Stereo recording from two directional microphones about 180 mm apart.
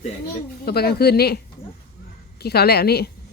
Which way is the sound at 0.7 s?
60° left (ahead or behind).